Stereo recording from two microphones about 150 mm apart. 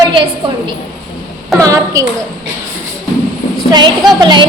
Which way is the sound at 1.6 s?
20° right (ahead or behind).